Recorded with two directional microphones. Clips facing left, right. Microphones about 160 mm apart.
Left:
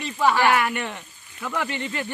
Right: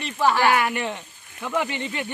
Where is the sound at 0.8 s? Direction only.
20° right (ahead or behind).